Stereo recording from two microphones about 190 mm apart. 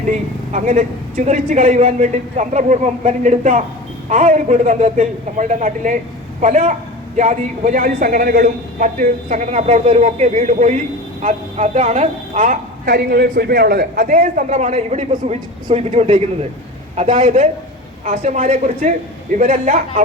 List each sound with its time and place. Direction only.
0.5 s a man's voice: 45° right (ahead or behind)